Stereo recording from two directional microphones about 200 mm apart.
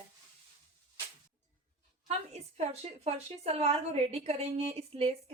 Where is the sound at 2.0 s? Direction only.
30° right (ahead or behind).